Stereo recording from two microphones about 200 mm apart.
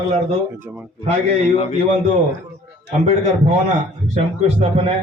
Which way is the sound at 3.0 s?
35° right (ahead or behind).